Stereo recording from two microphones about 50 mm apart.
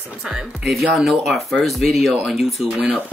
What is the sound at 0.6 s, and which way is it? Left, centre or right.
A woman's voice, centre.